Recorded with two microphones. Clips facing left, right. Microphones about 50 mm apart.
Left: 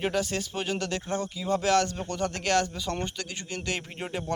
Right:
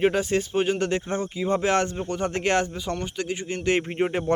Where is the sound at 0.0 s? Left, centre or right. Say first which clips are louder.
Right 6 dB; right.